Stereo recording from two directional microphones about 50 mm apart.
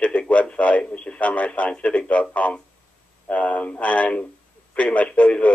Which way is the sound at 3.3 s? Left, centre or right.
Left.